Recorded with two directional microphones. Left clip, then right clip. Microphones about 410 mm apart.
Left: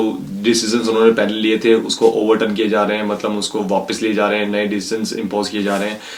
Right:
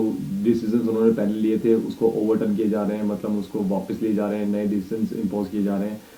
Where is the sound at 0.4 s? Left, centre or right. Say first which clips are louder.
Left 7 dB; centre.